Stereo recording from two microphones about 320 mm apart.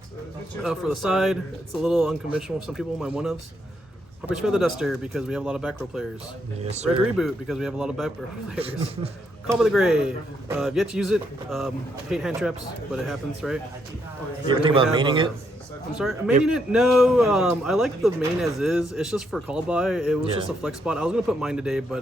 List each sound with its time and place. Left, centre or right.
0.6 s speech: centre
6.7 s speech: centre
7.2 s speech: centre
8.5 s a man's voice: centre
9.5 s speech: centre
14.4 s a man's voice: centre
16.0 s speech: centre